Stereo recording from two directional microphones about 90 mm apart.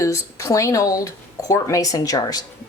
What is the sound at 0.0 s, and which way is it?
Speech, 35° left (ahead or behind).